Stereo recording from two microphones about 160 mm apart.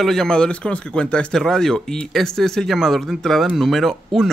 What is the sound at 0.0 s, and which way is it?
A man's voice, 5° left (ahead or behind).